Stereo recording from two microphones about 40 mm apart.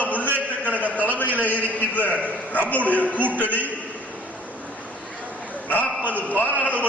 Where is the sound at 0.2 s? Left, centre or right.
Right.